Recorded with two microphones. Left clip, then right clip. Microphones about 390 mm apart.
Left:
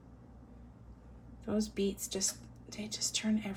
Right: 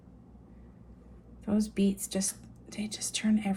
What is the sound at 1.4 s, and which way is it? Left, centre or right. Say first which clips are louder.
A woman's voice: right 3 dB; centre.